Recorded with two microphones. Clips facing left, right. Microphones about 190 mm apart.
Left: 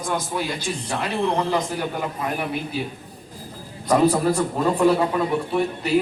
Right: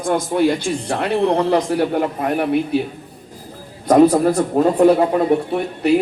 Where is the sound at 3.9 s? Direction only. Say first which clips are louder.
Right 6 dB; 65° right (ahead or behind).